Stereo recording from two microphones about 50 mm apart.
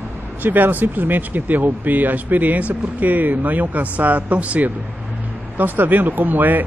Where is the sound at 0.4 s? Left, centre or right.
Right.